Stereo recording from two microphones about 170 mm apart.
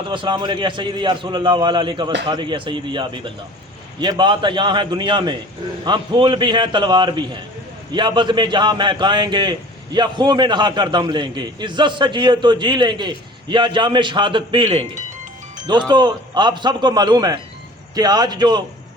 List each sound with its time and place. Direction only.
0.1 s a man's voice: 30° right (ahead or behind)